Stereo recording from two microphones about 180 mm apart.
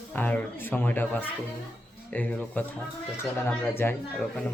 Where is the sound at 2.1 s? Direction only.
10° left (ahead or behind).